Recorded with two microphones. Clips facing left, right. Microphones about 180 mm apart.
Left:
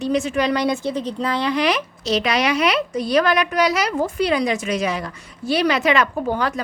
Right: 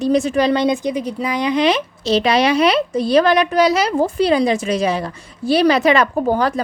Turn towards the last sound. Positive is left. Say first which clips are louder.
# right 5 dB
turn(degrees=-40)  # may be behind; listen again after turning